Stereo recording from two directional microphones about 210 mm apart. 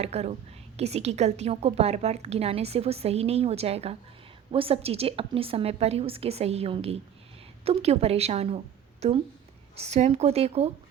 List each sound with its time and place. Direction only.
0.0 s a woman's voice: 30° right (ahead or behind)